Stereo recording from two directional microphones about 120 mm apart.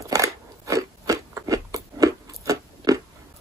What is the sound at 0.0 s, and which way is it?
Biting, 25° right (ahead or behind).